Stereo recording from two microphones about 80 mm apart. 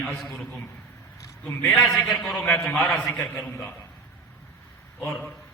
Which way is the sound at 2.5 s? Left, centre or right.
Centre.